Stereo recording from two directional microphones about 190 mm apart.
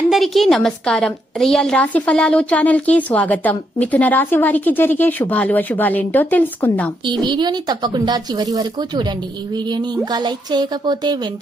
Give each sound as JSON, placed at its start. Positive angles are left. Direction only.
{"t": 0.1, "sound": "a woman's voice", "side_deg": 0}
{"t": 7.1, "sound": "speech", "side_deg": -25}
{"t": 10.1, "sound": "speech", "side_deg": -20}